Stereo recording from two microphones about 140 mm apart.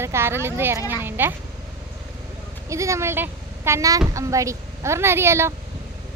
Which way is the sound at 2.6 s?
20° right (ahead or behind).